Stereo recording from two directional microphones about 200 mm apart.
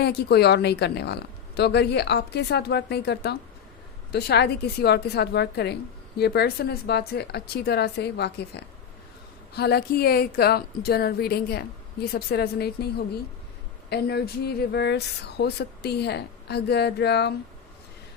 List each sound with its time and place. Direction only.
0.0 s a woman's voice: 55° left (ahead or behind)
13.9 s speech: 55° left (ahead or behind)